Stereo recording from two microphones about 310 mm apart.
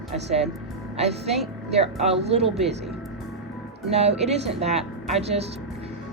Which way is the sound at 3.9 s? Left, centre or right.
Centre.